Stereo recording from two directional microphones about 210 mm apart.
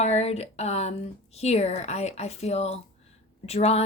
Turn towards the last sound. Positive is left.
turn(degrees=30)  # may be behind; listen again after turning